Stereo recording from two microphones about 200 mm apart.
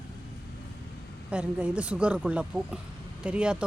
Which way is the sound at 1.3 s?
5° right (ahead or behind).